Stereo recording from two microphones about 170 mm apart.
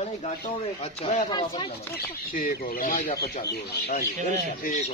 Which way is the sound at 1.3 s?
25° left (ahead or behind).